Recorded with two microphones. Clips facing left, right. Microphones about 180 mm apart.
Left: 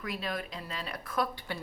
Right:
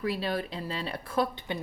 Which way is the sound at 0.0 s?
30° right (ahead or behind).